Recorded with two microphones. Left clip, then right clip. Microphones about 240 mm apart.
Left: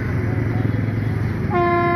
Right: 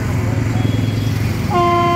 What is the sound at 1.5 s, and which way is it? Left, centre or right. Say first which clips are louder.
Vehicle: right 4 dB; centre.